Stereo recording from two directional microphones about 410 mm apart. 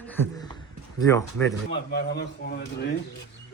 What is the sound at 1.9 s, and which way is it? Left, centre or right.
Speech, left.